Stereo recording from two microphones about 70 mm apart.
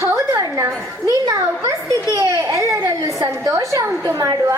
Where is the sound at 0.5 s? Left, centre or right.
Right.